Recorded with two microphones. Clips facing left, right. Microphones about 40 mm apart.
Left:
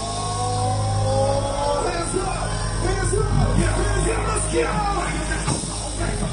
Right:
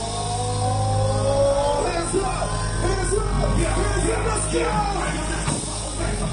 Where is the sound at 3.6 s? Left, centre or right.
Left.